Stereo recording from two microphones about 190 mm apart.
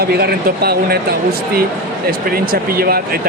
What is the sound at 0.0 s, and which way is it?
Speech, 55° right (ahead or behind).